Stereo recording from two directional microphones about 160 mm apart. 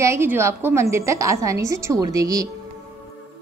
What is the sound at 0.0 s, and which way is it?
A woman's voice, 15° right (ahead or behind).